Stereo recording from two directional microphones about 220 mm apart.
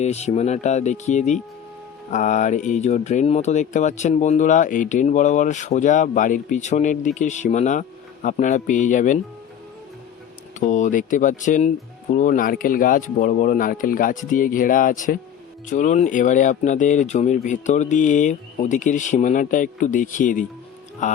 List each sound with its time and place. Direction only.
0.0 s speech: 30° left (ahead or behind)
10.6 s speech: 35° left (ahead or behind)